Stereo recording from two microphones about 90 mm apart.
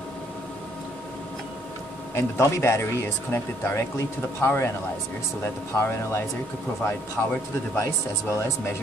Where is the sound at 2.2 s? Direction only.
30° left (ahead or behind).